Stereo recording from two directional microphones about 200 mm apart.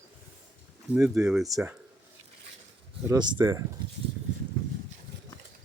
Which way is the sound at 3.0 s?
20° right (ahead or behind).